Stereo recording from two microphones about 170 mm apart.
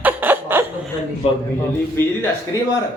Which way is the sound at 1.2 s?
40° left (ahead or behind).